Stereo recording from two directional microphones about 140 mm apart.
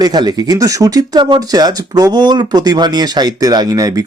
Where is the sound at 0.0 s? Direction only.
30° right (ahead or behind).